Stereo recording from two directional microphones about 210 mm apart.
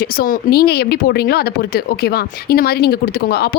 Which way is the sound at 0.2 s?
45° left (ahead or behind).